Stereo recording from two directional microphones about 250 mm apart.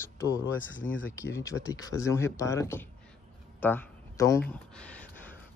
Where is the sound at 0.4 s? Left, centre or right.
Left.